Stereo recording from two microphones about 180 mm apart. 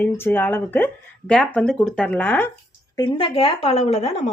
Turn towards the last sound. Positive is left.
turn(degrees=35)  # may be behind; listen again after turning